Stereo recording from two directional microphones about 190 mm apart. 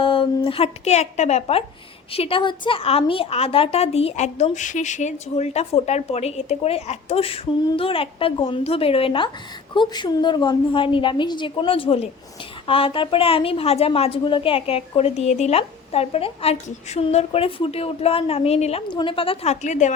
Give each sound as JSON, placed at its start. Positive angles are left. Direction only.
{"t": 0.0, "sound": "a woman's voice", "side_deg": 30}